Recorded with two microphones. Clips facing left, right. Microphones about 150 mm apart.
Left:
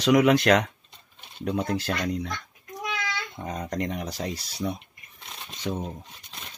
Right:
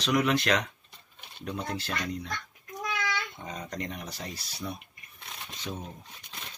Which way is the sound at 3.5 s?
40° left (ahead or behind).